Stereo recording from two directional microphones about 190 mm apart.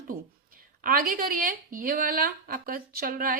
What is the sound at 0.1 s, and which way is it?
Speech, 45° right (ahead or behind).